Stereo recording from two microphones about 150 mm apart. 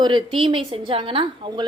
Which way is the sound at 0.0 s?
30° right (ahead or behind).